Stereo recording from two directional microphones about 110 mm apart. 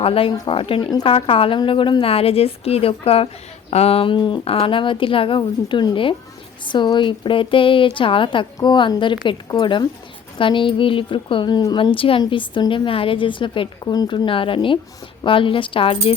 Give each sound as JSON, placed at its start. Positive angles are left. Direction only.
{"t": 0.0, "sound": "a woman's voice", "side_deg": 60}
{"t": 14.3, "sound": "a woman's voice", "side_deg": 55}